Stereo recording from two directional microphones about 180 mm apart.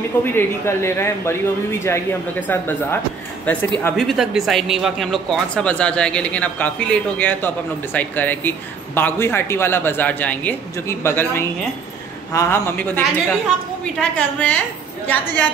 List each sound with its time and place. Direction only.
0.2 s speech: 10° left (ahead or behind)
2.4 s speech: 10° left (ahead or behind)
3.9 s speech: centre (ahead or behind)